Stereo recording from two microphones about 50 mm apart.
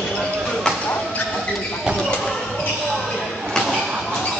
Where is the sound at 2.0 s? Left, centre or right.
Centre.